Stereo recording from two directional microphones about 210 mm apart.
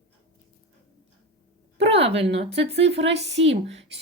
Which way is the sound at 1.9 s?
30° right (ahead or behind).